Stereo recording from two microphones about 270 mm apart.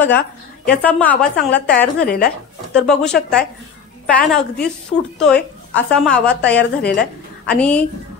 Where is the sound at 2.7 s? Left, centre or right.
Centre.